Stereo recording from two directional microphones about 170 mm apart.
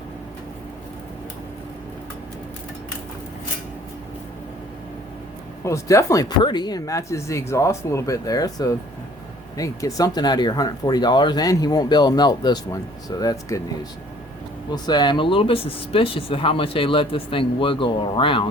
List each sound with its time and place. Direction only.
5.6 s speech: 15° left (ahead or behind)
14.7 s speech: 25° left (ahead or behind)